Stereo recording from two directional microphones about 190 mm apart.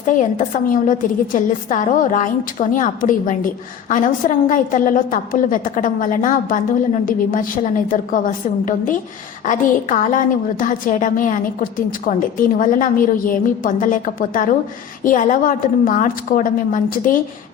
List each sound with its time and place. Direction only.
0.0 s a woman's voice: 40° left (ahead or behind)